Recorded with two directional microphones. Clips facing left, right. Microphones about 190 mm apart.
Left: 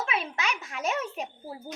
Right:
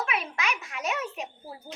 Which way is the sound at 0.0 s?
30° left (ahead or behind).